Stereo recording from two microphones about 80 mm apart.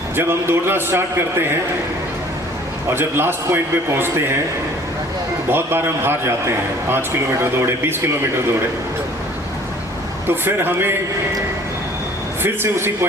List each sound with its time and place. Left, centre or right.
0.2 s a man's voice: right
2.9 s a man's voice: right
5.5 s a man's voice: right
10.2 s a man's voice: right
12.4 s speech: right